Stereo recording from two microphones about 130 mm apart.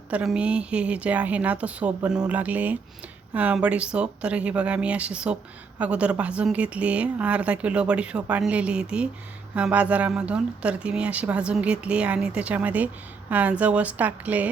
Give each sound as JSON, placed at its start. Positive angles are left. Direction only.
{"t": 0.1, "sound": "speech", "side_deg": -10}